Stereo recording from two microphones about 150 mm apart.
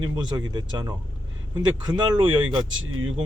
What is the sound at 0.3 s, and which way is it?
Speech, 30° right (ahead or behind).